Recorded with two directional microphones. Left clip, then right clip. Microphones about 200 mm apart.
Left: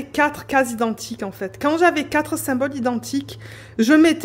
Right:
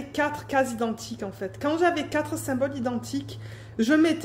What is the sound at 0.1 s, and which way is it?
A woman's voice, 45° left (ahead or behind).